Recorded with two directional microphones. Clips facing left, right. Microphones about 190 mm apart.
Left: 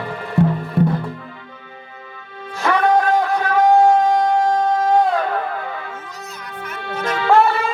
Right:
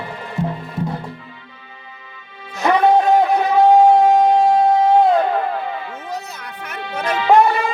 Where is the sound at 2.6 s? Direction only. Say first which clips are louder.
Right 3 dB; 15° right (ahead or behind).